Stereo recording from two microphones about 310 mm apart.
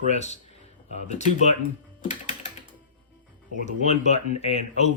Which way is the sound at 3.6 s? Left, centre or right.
Left.